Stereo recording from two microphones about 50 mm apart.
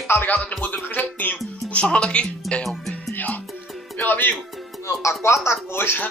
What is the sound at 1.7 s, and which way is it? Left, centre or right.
Speech, left.